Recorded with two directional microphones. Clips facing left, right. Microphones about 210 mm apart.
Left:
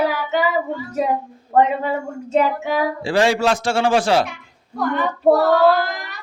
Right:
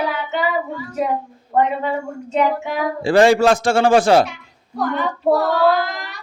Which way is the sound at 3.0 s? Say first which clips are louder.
Right 6 dB; 50° right (ahead or behind).